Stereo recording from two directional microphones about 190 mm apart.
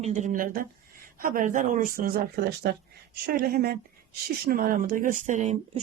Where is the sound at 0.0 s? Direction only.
40° right (ahead or behind).